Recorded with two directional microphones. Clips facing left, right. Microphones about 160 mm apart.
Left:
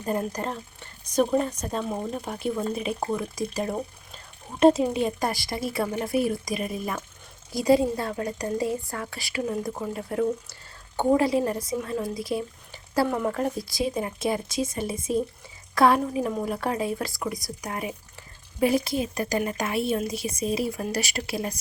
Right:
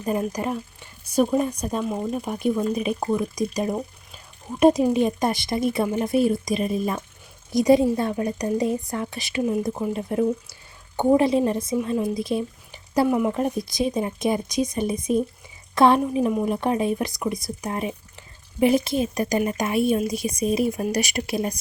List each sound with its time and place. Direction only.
0.0 s a woman's voice: 10° right (ahead or behind)